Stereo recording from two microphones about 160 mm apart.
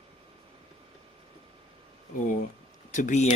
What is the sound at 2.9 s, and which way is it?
Speech, 50° left (ahead or behind).